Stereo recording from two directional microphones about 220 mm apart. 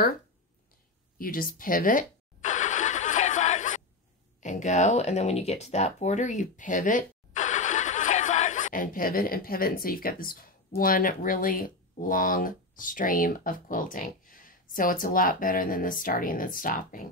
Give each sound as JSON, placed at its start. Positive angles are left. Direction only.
{"t": 1.1, "sound": "vehicle", "side_deg": 40}
{"t": 4.4, "sound": "speech", "side_deg": 35}